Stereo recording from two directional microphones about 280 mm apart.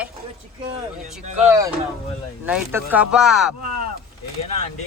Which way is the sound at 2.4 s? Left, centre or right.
Centre.